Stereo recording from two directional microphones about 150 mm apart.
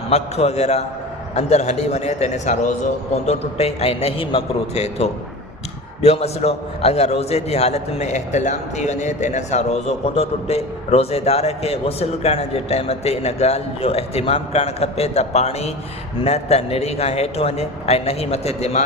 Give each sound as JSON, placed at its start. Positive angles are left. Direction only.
{"t": 0.1, "sound": "a man's voice", "side_deg": 45}